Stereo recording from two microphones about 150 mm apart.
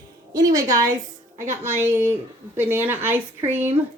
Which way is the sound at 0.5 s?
20° right (ahead or behind).